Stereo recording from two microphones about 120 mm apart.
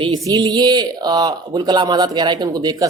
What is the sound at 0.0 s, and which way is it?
Speech, 35° right (ahead or behind).